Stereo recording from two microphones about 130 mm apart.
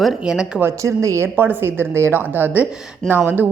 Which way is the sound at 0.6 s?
25° right (ahead or behind).